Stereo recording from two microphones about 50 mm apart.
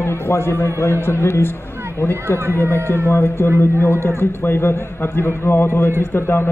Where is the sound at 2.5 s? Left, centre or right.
Left.